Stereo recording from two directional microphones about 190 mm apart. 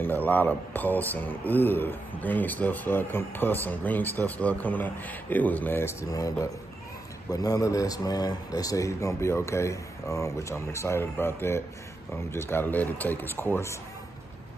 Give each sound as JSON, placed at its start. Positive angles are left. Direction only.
{"t": 0.0, "sound": "speech", "side_deg": 10}